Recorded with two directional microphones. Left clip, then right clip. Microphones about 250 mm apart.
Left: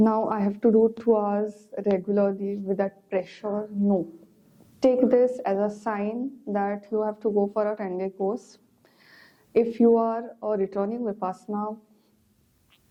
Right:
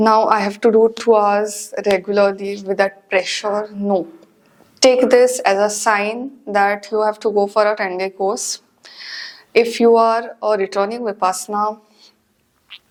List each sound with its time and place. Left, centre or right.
0.0 s a woman's voice: centre
3.8 s speech: right
4.8 s a woman's voice: centre
11.5 s speech: centre